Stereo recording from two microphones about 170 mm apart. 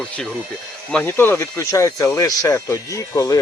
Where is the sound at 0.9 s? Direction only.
10° left (ahead or behind).